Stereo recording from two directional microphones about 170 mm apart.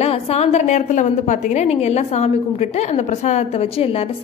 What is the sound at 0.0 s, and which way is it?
A woman's voice, 35° left (ahead or behind).